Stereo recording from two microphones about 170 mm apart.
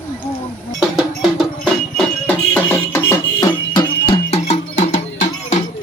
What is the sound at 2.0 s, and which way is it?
Music, 10° left (ahead or behind).